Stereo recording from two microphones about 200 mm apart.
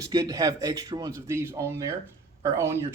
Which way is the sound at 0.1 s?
20° right (ahead or behind).